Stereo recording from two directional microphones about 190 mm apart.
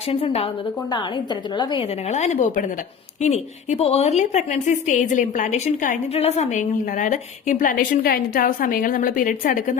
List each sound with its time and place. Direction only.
0.1 s a woman's voice: 30° left (ahead or behind)
2.0 s a woman's voice: 35° left (ahead or behind)